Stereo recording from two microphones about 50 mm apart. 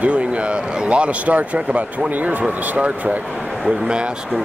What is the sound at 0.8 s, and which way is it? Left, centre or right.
Speech, right.